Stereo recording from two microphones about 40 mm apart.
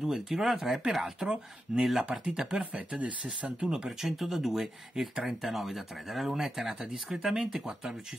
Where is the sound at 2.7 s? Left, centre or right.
Right.